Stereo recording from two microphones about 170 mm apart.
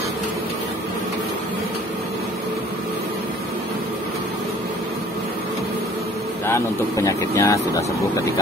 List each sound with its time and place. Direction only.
6.4 s speech: 15° left (ahead or behind)